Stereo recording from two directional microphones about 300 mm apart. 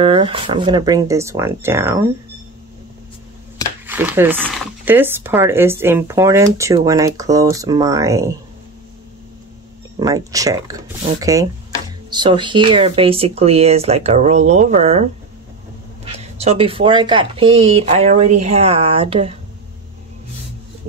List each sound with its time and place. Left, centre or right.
0.0 s speech: centre
3.8 s speech: centre
9.9 s speech: centre
16.3 s speech: centre